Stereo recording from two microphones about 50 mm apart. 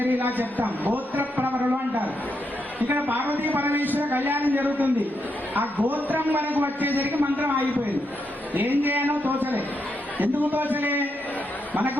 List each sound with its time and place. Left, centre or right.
0.0 s a man's voice: right